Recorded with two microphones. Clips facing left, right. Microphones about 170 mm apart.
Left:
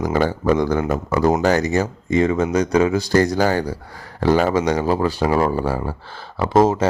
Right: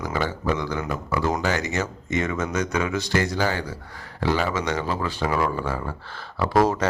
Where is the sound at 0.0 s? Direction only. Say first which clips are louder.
Left 7 dB; 45° left (ahead or behind).